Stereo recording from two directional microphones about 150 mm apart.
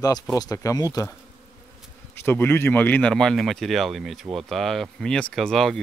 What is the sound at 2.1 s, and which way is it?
Speech, 15° left (ahead or behind).